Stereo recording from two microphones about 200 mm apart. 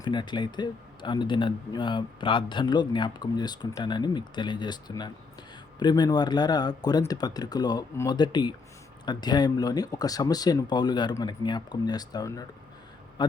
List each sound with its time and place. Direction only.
0.0 s speech: 20° left (ahead or behind)